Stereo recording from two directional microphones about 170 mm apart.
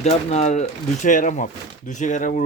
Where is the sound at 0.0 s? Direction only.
40° left (ahead or behind).